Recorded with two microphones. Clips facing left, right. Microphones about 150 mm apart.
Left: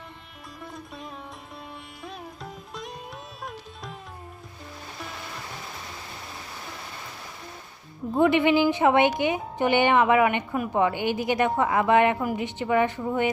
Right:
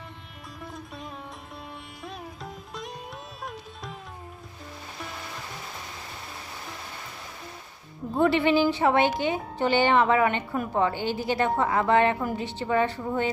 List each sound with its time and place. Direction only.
0.6 s music: centre (ahead or behind)
2.0 s sitar: centre (ahead or behind)
3.4 s music: centre (ahead or behind)
8.1 s a woman's voice: 15° left (ahead or behind)